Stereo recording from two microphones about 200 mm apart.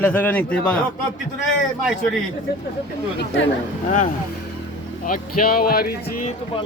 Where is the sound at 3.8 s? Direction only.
40° left (ahead or behind).